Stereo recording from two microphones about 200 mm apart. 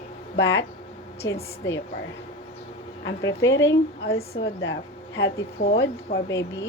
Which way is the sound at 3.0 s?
65° left (ahead or behind).